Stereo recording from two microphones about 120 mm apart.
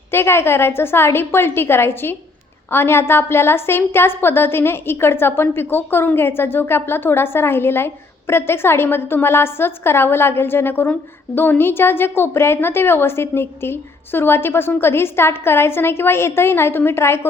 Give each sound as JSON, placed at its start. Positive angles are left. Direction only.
{"t": 0.1, "sound": "a woman's voice", "side_deg": 20}